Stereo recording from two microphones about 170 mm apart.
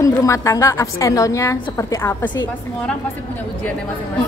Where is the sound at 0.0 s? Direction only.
20° left (ahead or behind).